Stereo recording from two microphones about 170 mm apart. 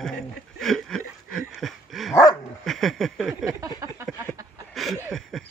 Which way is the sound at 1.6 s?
Centre (ahead or behind).